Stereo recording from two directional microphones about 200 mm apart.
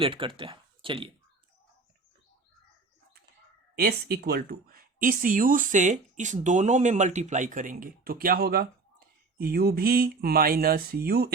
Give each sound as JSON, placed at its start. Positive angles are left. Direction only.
{"t": 0.0, "sound": "speech", "side_deg": -25}
{"t": 3.8, "sound": "speech", "side_deg": -50}